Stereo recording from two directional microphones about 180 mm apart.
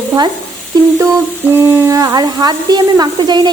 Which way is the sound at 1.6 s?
15° right (ahead or behind).